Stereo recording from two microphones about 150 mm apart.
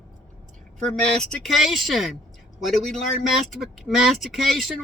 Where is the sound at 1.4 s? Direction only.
Centre (ahead or behind).